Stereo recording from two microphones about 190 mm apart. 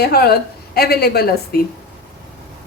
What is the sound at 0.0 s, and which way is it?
A woman's voice, 55° left (ahead or behind).